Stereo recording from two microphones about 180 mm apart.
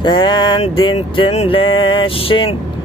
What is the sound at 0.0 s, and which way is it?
Speech, 25° left (ahead or behind).